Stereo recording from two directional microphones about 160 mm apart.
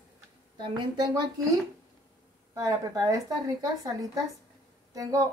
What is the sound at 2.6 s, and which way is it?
Speech, 20° right (ahead or behind).